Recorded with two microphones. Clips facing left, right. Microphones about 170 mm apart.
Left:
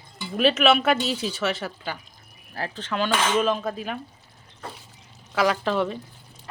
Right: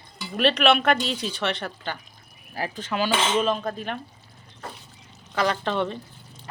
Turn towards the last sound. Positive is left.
turn(degrees=5)  # may be behind; listen again after turning